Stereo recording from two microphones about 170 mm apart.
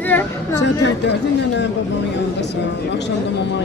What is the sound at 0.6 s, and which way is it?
Speech, 90° left.